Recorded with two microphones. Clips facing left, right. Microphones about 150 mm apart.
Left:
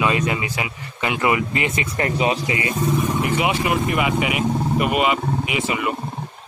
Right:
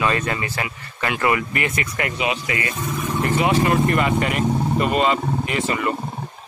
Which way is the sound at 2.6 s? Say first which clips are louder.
Left 5 dB; 15° left (ahead or behind).